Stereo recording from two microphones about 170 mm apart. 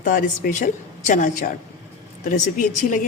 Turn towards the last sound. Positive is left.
turn(degrees=50)  # may be behind; listen again after turning